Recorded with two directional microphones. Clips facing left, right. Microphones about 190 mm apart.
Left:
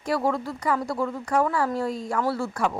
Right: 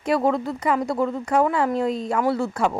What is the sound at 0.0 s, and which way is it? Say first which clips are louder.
Speech: right 4 dB; 20° right (ahead or behind).